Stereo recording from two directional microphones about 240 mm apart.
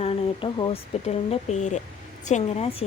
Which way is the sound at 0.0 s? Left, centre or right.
Left.